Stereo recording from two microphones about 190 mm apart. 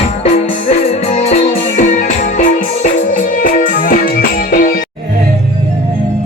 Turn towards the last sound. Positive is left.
turn(degrees=45)  # may be behind; listen again after turning